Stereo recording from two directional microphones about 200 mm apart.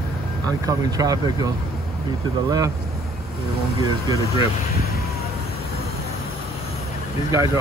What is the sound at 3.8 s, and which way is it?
Speech, 15° right (ahead or behind).